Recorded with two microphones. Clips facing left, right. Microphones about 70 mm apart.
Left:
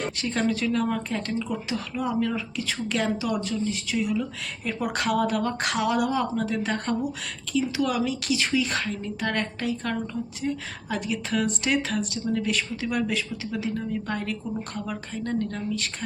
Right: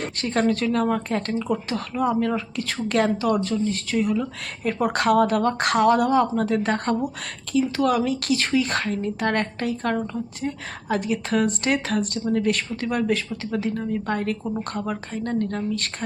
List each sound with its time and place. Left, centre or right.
0.2 s speech: right
0.9 s a woman's voice: right
4.9 s a woman's voice: right
15.4 s speech: right